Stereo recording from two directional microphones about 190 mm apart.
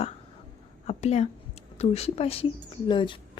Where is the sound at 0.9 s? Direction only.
35° left (ahead or behind).